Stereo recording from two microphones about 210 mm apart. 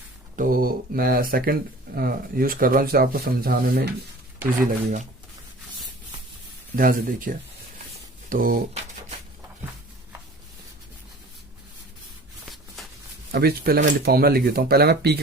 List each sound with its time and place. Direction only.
0.3 s speech: 40° right (ahead or behind)
6.7 s speech: 40° right (ahead or behind)
12.5 s shuffling cards: centre (ahead or behind)
13.3 s speech: 50° right (ahead or behind)